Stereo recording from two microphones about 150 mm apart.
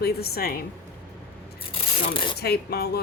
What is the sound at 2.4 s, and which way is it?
Speech, 90° left.